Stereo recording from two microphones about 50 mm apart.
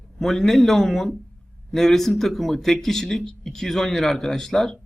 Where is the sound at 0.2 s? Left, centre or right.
Centre.